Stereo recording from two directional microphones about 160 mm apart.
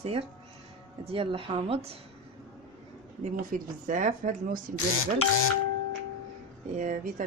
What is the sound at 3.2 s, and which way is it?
Speech, 55° right (ahead or behind).